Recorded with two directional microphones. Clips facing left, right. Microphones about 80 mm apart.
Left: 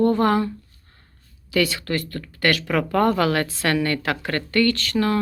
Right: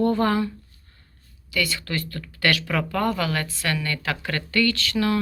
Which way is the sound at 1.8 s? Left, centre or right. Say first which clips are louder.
Left 4 dB; left.